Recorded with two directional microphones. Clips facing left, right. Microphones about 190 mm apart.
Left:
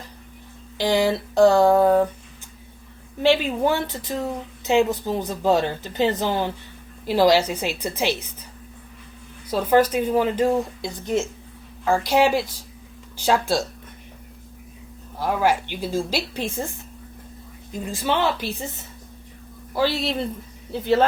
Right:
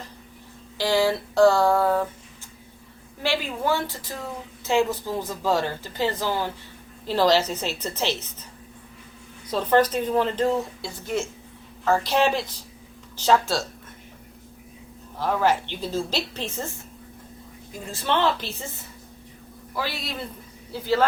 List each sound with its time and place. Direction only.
0.8 s a woman's voice: 20° left (ahead or behind)
3.2 s a woman's voice: 20° left (ahead or behind)
9.5 s speech: 10° left (ahead or behind)
15.2 s speech: 10° left (ahead or behind)
19.7 s a woman's voice: 30° left (ahead or behind)